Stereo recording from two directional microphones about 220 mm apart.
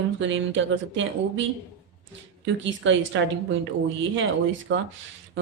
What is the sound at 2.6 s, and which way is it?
Speech, 60° right (ahead or behind).